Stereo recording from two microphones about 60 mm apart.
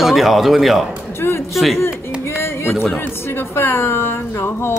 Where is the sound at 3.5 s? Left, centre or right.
Left.